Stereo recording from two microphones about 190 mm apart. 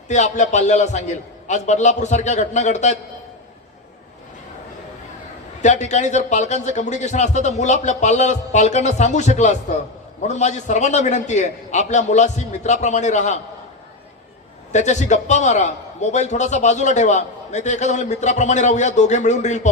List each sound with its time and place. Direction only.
0.1 s a man's voice: 40° left (ahead or behind)
5.6 s a man's voice: 40° left (ahead or behind)
14.7 s a man's voice: 40° left (ahead or behind)